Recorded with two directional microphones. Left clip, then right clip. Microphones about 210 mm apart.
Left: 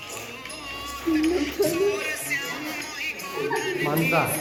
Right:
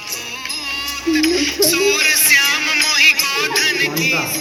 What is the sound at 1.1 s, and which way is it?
Music, 45° right (ahead or behind).